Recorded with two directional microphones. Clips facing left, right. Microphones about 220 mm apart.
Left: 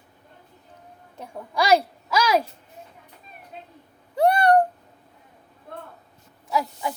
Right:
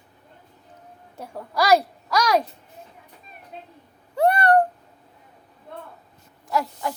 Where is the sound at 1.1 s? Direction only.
10° right (ahead or behind).